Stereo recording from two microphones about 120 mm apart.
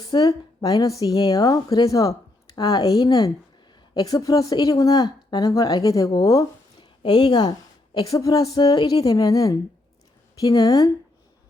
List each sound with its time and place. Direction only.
0.0 s a woman's voice: 30° left (ahead or behind)